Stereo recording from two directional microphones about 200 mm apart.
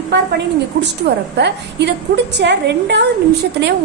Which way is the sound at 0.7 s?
55° right (ahead or behind).